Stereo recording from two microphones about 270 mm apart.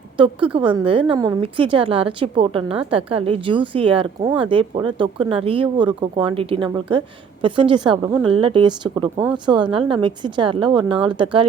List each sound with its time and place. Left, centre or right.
0.2 s a woman's voice: centre